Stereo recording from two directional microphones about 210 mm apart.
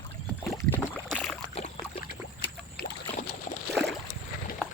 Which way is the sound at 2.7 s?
50° left (ahead or behind).